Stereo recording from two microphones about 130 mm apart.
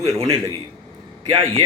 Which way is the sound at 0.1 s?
25° right (ahead or behind).